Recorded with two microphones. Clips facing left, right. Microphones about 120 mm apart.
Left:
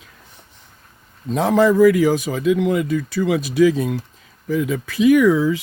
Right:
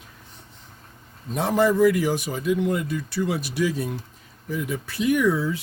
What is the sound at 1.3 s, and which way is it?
Speech, 90° left.